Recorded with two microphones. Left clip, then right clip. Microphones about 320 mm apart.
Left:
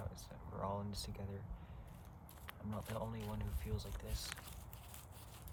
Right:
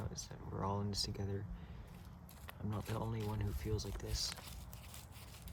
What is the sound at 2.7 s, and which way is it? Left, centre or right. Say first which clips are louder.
Speech: right 1 dB; right.